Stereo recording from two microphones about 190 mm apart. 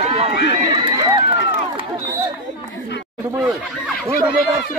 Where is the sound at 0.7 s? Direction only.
20° right (ahead or behind).